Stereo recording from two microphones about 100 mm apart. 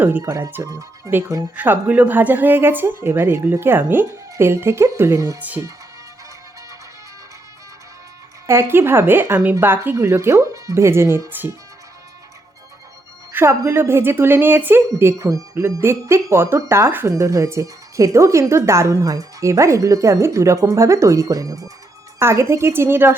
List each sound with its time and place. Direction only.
0.0 s speech: 25° right (ahead or behind)
1.5 s speech: 20° right (ahead or behind)
5.4 s speech: 15° right (ahead or behind)
8.4 s speech: 25° right (ahead or behind)
13.3 s speech: 25° right (ahead or behind)
22.2 s speech: 25° right (ahead or behind)